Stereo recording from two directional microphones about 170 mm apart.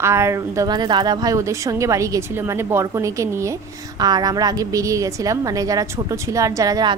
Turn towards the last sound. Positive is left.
turn(degrees=-20)  # may be behind; listen again after turning